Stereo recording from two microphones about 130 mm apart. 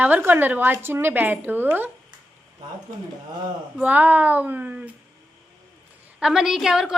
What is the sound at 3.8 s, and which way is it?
A woman's voice, 10° right (ahead or behind).